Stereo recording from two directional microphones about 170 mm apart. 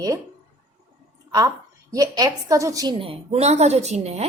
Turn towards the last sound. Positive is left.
turn(degrees=-40)  # may be behind; listen again after turning